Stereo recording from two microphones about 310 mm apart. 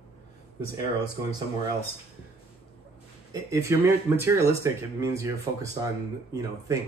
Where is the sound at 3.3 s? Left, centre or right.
Centre.